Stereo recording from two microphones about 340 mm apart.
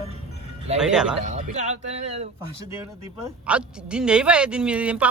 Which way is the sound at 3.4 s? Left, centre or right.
Centre.